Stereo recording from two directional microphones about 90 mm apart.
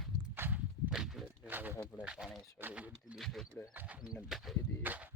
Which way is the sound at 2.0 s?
10° right (ahead or behind).